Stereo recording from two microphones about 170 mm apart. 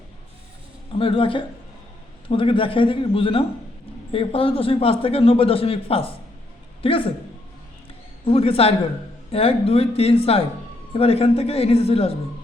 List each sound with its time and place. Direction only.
0.9 s a man's voice: 30° left (ahead or behind)
8.2 s a man's voice: 35° left (ahead or behind)